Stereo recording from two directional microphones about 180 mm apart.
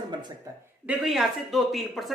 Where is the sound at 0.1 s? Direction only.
25° right (ahead or behind).